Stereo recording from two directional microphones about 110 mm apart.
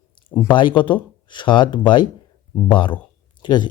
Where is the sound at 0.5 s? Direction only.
45° left (ahead or behind).